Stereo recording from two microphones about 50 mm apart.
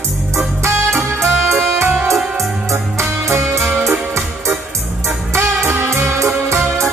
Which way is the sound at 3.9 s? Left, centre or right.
Right.